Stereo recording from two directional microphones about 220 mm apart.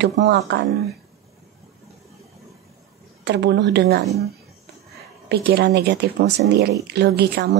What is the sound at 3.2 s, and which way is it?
Speech, 50° right (ahead or behind).